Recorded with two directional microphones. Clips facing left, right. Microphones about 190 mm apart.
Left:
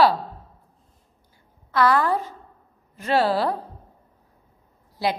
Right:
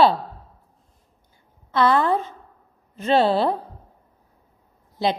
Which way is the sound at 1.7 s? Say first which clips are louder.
Right 1 dB; 25° right (ahead or behind).